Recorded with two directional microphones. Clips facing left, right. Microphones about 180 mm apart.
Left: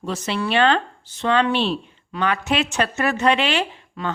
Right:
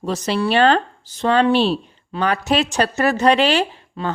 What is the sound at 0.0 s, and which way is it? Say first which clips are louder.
Speech: right 4 dB; 40° right (ahead or behind).